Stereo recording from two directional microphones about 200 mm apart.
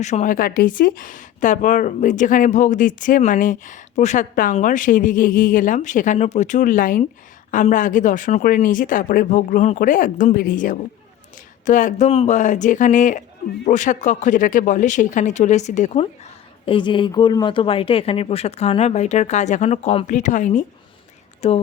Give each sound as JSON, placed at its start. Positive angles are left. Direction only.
{"t": 0.0, "sound": "speech", "side_deg": 35}